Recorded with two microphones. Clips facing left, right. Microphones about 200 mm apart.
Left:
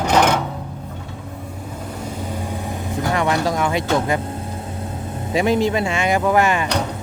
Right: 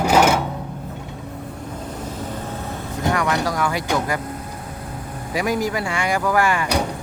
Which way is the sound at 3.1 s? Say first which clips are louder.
Left 1 dB; 25° left (ahead or behind).